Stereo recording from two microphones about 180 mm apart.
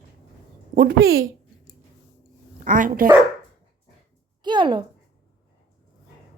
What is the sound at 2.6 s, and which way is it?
Speech, 50° right (ahead or behind).